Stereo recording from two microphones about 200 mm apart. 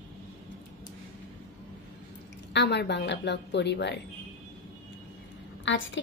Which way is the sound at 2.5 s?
60° left (ahead or behind).